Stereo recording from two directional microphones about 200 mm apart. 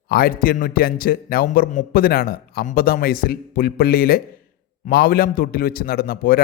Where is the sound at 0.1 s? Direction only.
50° left (ahead or behind).